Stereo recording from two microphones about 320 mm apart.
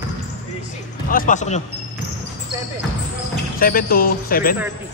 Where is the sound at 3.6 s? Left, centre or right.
Left.